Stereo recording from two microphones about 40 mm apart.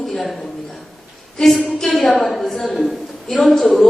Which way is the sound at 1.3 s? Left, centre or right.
Centre.